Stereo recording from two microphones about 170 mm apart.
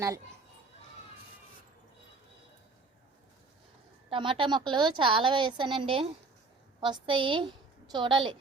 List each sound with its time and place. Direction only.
4.1 s a woman's voice: 30° right (ahead or behind)